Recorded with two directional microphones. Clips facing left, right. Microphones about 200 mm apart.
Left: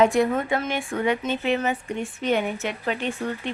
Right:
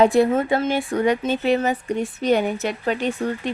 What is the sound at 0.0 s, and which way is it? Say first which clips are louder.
A woman's voice: right 3 dB; 35° right (ahead or behind).